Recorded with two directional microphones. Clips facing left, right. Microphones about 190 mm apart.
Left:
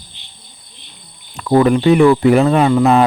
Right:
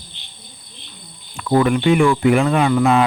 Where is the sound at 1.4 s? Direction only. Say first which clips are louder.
Left 4 dB; 35° left (ahead or behind).